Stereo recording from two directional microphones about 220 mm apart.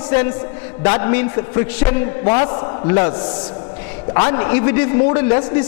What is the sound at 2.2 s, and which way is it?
A man's voice, 25° left (ahead or behind).